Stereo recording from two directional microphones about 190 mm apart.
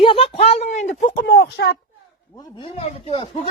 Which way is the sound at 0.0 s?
30° left (ahead or behind).